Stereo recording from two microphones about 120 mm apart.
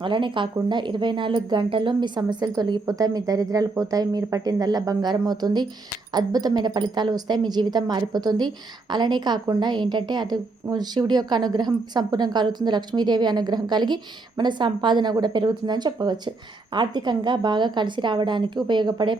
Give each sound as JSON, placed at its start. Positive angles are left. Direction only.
{"t": 0.0, "sound": "speech", "side_deg": -45}